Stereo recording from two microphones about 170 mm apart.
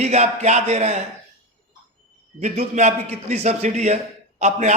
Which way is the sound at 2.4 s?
45° right (ahead or behind).